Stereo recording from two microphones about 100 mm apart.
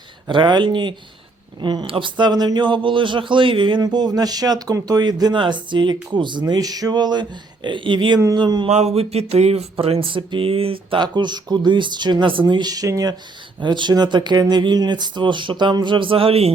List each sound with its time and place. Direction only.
0.3 s a man's voice: 50° right (ahead or behind)
6.4 s a man's voice: 40° right (ahead or behind)
8.6 s speech: 90° right; by 11.0 s 65° right (ahead or behind)
11.0 s a man's voice: 50° right (ahead or behind)
13.6 s a man's voice: 50° right (ahead or behind); by 16.5 s 75° right (ahead or behind)